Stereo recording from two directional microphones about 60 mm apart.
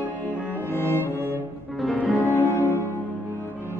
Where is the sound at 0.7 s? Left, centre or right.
Left.